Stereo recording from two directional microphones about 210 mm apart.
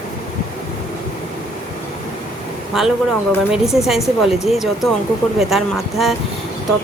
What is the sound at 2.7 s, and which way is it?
A woman's voice, centre (ahead or behind).